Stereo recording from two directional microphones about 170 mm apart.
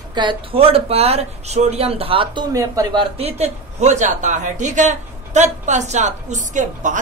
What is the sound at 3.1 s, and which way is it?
Speech, 40° right (ahead or behind).